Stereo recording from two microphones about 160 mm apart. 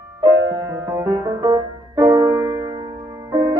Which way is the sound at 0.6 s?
15° right (ahead or behind).